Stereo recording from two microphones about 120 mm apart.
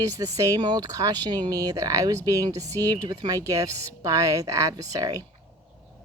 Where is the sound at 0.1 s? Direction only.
25° right (ahead or behind).